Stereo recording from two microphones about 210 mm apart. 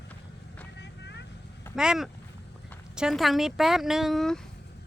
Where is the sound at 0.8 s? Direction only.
55° left (ahead or behind).